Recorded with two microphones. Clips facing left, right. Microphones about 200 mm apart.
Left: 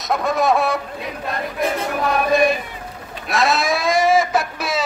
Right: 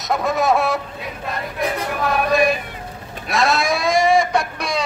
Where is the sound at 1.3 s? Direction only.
Centre (ahead or behind).